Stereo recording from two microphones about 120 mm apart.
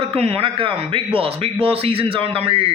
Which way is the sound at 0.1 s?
55° right (ahead or behind).